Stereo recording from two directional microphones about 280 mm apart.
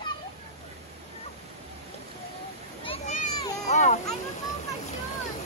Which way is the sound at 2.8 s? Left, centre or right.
Left.